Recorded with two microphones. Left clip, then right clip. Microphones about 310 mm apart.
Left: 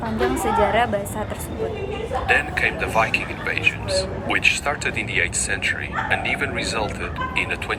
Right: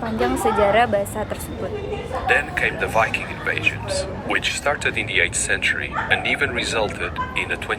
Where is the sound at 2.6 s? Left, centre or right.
Centre.